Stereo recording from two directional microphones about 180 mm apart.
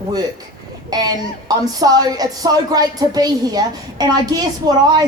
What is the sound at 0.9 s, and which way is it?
Speech, 20° right (ahead or behind).